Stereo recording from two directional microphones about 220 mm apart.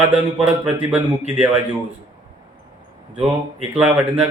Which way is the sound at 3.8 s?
5° right (ahead or behind).